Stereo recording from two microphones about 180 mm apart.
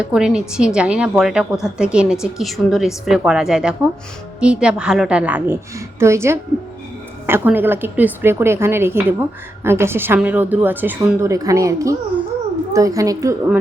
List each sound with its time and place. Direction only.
0.0 s a woman's voice: 5° right (ahead or behind)